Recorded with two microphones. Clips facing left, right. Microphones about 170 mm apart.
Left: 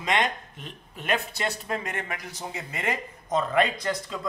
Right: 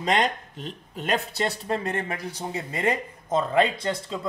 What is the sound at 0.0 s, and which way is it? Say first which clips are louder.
Speech: right 3 dB; 35° right (ahead or behind).